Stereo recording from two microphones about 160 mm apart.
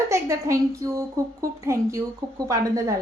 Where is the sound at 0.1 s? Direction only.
20° right (ahead or behind).